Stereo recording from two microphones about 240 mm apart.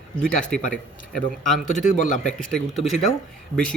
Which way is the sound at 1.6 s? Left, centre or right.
Left.